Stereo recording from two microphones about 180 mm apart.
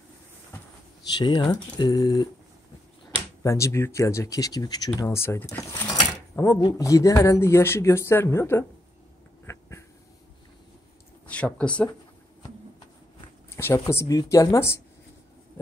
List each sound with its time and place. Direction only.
1.1 s speech: 25° left (ahead or behind)
3.4 s speech: 15° left (ahead or behind)
9.5 s a sound: 15° left (ahead or behind)
11.2 s speech: 5° left (ahead or behind)
13.6 s speech: 15° left (ahead or behind)